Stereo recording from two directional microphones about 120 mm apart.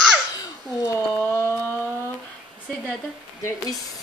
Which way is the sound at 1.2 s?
20° right (ahead or behind).